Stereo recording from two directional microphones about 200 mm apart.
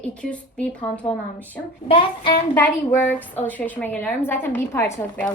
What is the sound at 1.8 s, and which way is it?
Child singing, 25° left (ahead or behind).